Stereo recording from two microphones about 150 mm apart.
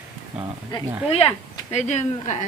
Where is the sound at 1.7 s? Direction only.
50° left (ahead or behind).